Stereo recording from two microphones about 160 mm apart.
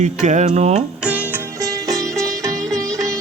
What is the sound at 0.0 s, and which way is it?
Speech, 45° right (ahead or behind).